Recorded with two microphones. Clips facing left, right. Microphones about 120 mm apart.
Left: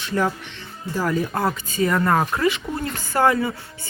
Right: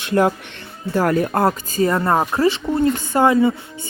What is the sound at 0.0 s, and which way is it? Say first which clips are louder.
Speech: right 6 dB; 60° right (ahead or behind).